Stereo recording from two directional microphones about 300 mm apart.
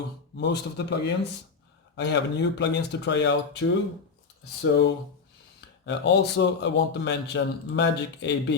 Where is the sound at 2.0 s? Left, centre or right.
Left.